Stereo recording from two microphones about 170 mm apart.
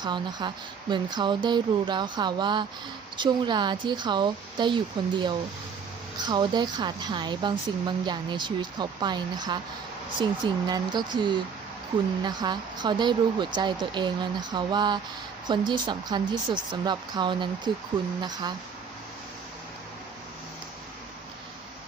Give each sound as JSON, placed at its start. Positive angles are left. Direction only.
{"t": 0.0, "sound": "speech", "side_deg": -25}